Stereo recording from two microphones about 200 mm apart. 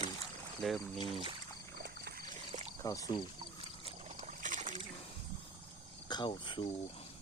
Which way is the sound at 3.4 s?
30° right (ahead or behind).